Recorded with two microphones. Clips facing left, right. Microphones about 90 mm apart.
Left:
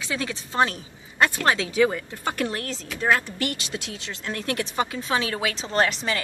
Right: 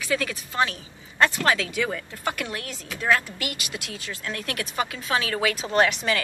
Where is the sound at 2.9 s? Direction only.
25° left (ahead or behind).